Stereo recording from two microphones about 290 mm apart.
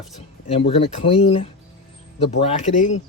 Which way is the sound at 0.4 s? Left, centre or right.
Centre.